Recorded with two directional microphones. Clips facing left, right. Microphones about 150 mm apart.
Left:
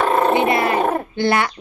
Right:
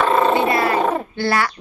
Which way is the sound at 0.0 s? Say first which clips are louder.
Even; 15° left (ahead or behind).